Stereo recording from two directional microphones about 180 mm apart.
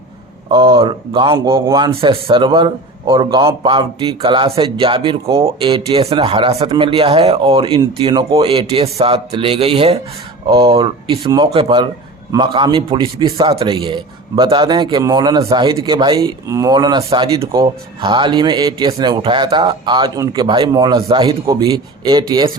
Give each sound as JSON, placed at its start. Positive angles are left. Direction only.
{"t": 0.4, "sound": "a man's voice", "side_deg": -30}